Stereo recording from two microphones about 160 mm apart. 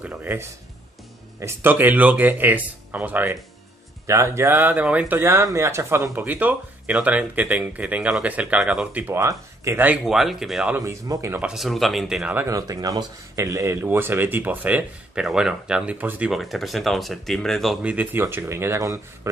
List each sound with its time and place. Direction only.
0.0 s speech: 10° right (ahead or behind)
10.8 s speech: 20° right (ahead or behind)
11.5 s speech: centre (ahead or behind)
12.4 s speech: 20° right (ahead or behind); by 17.9 s centre (ahead or behind)
17.9 s speech: 15° right (ahead or behind)